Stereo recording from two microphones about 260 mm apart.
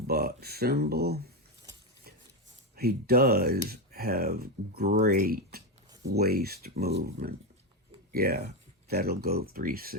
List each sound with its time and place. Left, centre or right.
0.1 s speech: right
2.7 s speech: right